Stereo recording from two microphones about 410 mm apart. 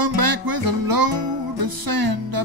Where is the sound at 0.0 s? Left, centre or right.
Right.